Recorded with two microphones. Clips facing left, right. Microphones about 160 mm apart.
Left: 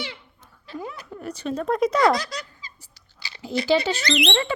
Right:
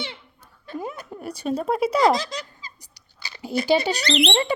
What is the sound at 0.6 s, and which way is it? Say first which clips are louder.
Chuckle: right 2 dB; 50° right (ahead or behind).